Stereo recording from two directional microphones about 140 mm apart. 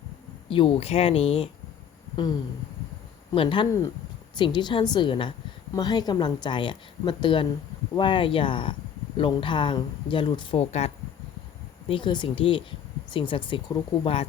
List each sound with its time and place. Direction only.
0.5 s a woman's voice: 40° left (ahead or behind)
3.3 s a woman's voice: 35° left (ahead or behind)
10.6 s speech: 50° left (ahead or behind)
11.9 s a woman's voice: 35° left (ahead or behind)